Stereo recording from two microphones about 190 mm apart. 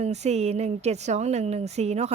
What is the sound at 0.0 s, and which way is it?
A woman's voice, 35° right (ahead or behind).